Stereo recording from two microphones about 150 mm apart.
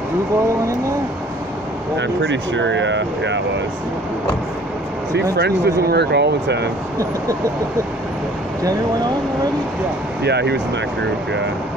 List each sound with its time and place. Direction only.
5.3 s speech: 90° right